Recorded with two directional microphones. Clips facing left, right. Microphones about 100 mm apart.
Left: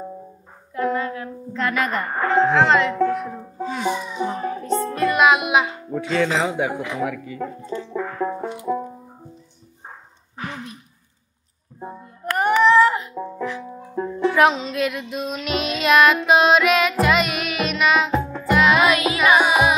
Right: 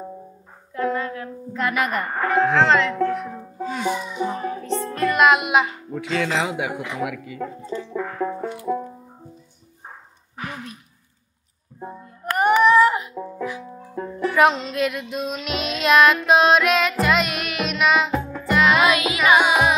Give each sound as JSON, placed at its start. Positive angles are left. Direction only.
{"t": 0.7, "sound": "a sound", "side_deg": 20}
{"t": 1.5, "sound": "a woman's voice", "side_deg": -10}
{"t": 2.1, "sound": "speech", "side_deg": 30}
{"t": 4.6, "sound": "music", "side_deg": 40}
{"t": 4.9, "sound": "music", "side_deg": 5}
{"t": 5.9, "sound": "speech", "side_deg": 35}
{"t": 8.4, "sound": "music", "side_deg": 25}
{"t": 12.3, "sound": "baby cry", "side_deg": -15}
{"t": 13.4, "sound": "music", "side_deg": -10}
{"t": 13.9, "sound": "music", "side_deg": 25}
{"t": 14.3, "sound": "music", "side_deg": 0}
{"t": 19.1, "sound": "carnatic music", "side_deg": 5}